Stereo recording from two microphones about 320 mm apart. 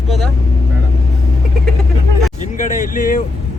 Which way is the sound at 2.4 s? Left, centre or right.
Left.